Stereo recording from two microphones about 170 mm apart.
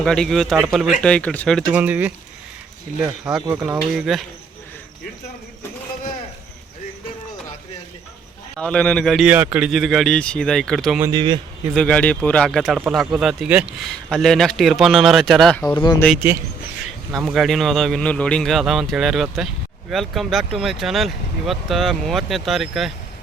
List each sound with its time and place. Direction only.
0.0 s speech: 5° left (ahead or behind)
1.7 s speech: 10° right (ahead or behind)
3.6 s speech: 5° right (ahead or behind)
8.5 s speech: 5° left (ahead or behind)
11.1 s speech: 30° right (ahead or behind)
11.7 s speech: 5° left (ahead or behind)
15.7 s speech: 25° left (ahead or behind)
17.1 s speech: centre (ahead or behind)